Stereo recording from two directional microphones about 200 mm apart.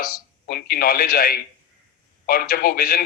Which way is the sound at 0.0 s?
45° left (ahead or behind).